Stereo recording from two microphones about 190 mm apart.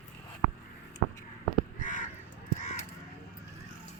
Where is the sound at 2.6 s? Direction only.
35° left (ahead or behind).